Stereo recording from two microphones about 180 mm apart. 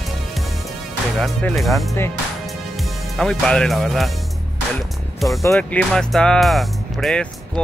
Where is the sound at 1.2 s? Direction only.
Centre (ahead or behind).